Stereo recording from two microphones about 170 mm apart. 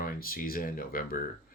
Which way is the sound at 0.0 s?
55° left (ahead or behind).